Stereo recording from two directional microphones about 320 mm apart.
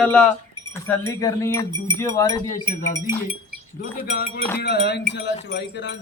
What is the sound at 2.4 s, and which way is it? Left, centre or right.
Wind chime, left.